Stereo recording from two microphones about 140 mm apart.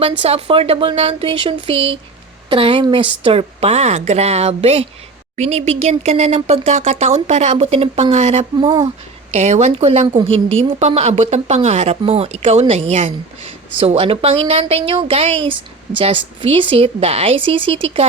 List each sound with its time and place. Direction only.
0.0 s speech: 45° right (ahead or behind)
8.5 s speech: 30° right (ahead or behind)
9.3 s speech: 50° right (ahead or behind)